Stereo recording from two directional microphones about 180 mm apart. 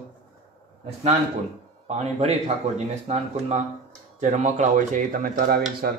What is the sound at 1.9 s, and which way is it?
A man's voice, 35° right (ahead or behind).